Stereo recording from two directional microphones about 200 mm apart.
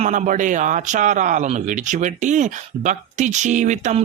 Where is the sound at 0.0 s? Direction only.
40° right (ahead or behind).